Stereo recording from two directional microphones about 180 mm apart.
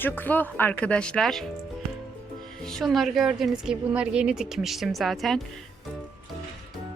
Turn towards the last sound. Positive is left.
turn(degrees=0)  # may be behind; listen again after turning